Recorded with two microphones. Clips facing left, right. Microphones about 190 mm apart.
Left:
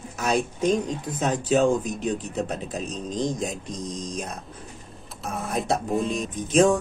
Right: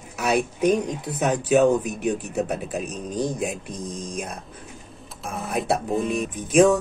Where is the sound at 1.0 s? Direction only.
70° right (ahead or behind).